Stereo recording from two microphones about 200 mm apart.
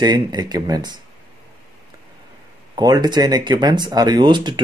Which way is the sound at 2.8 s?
20° right (ahead or behind).